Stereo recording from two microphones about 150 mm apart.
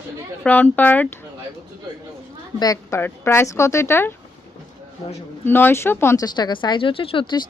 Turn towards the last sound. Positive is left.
turn(degrees=30)  # may be behind; listen again after turning